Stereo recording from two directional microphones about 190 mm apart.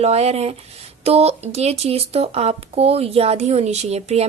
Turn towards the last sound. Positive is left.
turn(degrees=-35)  # may be behind; listen again after turning